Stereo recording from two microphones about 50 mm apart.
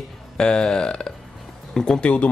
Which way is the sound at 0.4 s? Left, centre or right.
Centre.